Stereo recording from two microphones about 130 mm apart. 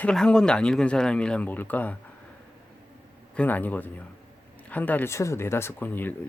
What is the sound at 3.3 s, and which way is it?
Speech, 10° left (ahead or behind).